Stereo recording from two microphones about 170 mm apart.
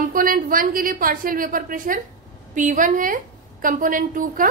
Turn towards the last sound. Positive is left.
turn(degrees=-55)  # may be behind; listen again after turning